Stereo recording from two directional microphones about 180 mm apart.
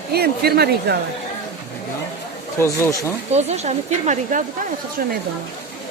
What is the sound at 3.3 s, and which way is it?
Speech, 35° right (ahead or behind).